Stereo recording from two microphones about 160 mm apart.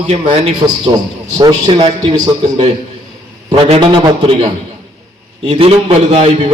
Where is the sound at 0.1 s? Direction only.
35° right (ahead or behind).